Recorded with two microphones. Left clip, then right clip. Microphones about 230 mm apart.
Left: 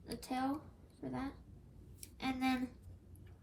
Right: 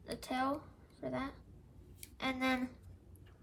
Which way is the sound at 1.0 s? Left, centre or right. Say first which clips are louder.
Right 4 dB; right.